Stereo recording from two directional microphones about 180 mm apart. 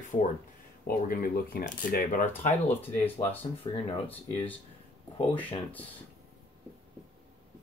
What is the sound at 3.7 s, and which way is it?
Speech, 30° left (ahead or behind).